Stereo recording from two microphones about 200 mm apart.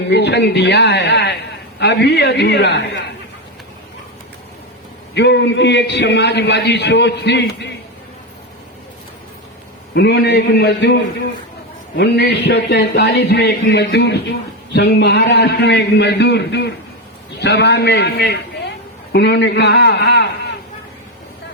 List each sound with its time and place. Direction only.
0.1 s a man's voice: 60° left (ahead or behind)
5.1 s a man's voice: 60° left (ahead or behind)
9.9 s a man's voice: 55° left (ahead or behind)